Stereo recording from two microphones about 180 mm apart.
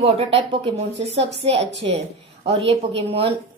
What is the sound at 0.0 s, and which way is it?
A woman's voice, 30° right (ahead or behind).